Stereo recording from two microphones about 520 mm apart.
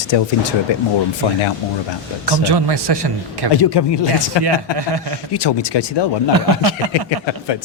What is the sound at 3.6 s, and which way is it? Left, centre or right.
Speech, left.